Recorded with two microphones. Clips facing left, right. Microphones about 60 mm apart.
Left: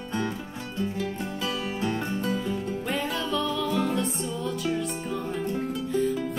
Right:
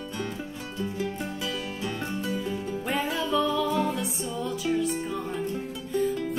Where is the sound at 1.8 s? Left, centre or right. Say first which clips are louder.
Left 3 dB; left.